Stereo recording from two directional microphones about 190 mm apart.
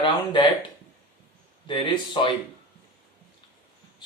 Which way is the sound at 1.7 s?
25° left (ahead or behind).